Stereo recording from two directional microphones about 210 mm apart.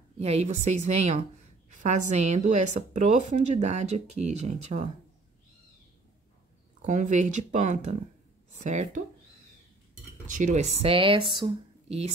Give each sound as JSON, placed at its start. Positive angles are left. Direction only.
{"t": 0.2, "sound": "a woman's voice", "side_deg": -30}
{"t": 6.8, "sound": "a sound", "side_deg": -35}
{"t": 7.5, "sound": "a woman's voice", "side_deg": -35}
{"t": 10.2, "sound": "speech", "side_deg": -35}